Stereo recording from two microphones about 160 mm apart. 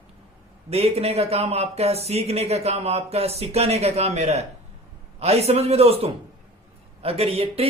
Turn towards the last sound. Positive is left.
turn(degrees=-40)  # may be behind; listen again after turning